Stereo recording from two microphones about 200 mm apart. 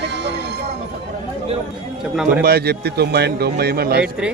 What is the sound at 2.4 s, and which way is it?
A man's voice, 50° right (ahead or behind).